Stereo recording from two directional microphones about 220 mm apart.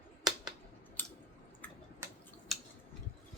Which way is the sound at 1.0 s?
10° left (ahead or behind).